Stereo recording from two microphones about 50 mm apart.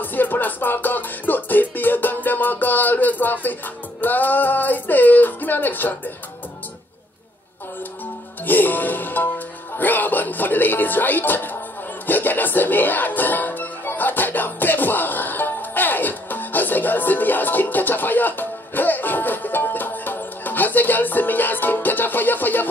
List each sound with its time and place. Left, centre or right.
0.0 s music: left
8.5 s music: left